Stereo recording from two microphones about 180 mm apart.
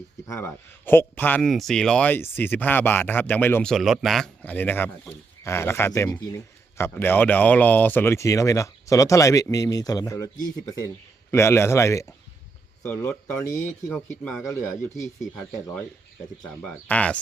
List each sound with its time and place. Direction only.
0.3 s speech: 15° left (ahead or behind)
11.3 s speech: 15° left (ahead or behind)
16.6 s speech: 10° left (ahead or behind)